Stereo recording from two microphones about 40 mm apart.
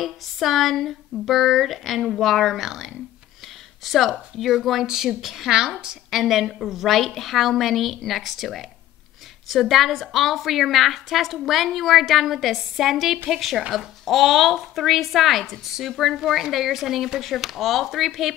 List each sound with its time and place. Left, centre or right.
0.0 s a woman's voice: centre
4.8 s speech: centre
6.0 s a woman's voice: centre